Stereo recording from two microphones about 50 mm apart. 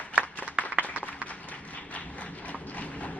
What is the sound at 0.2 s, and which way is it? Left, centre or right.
Applause, right.